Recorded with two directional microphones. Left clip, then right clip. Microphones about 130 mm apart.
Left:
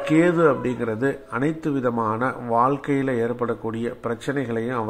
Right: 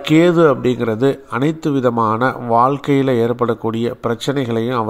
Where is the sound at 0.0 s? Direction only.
40° right (ahead or behind).